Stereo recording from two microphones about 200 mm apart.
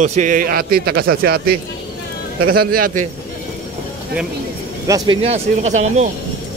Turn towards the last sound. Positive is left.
turn(degrees=-35)  # may be behind; listen again after turning